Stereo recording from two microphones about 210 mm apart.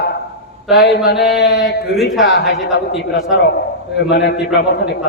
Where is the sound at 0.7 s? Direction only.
55° left (ahead or behind).